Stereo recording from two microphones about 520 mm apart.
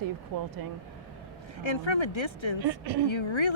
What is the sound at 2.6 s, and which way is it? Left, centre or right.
Speech, right.